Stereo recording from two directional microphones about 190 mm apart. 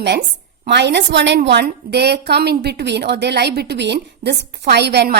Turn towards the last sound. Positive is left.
turn(degrees=-60)  # may be behind; listen again after turning